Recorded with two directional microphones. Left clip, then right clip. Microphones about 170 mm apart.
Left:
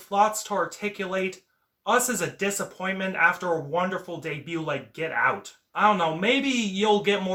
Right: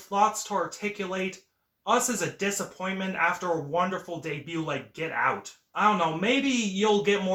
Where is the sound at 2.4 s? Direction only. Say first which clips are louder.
Left 2 dB; 20° left (ahead or behind).